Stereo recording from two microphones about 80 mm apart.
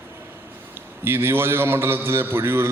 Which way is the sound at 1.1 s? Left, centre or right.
Right.